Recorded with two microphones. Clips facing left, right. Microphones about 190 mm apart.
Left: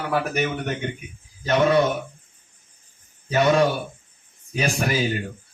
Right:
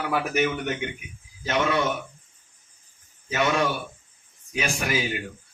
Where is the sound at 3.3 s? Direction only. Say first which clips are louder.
Left 6 dB; 40° left (ahead or behind).